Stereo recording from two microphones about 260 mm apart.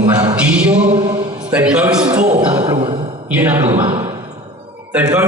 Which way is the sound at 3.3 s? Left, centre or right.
Centre.